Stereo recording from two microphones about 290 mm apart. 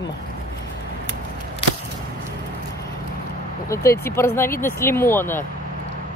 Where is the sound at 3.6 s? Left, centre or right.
Centre.